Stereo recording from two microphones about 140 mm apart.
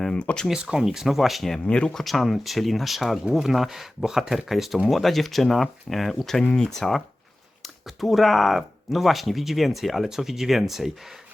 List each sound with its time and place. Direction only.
0.0 s speech: 10° left (ahead or behind)